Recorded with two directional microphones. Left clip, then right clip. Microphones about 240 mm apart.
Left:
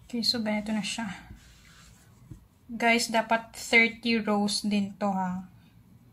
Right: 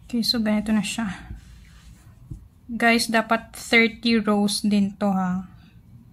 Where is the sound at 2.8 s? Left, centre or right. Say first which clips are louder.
Right 5 dB; centre.